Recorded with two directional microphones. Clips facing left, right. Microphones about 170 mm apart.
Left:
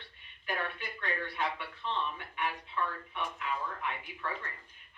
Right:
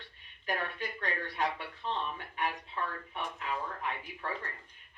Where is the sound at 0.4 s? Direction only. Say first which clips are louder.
Right 1 dB; 40° right (ahead or behind).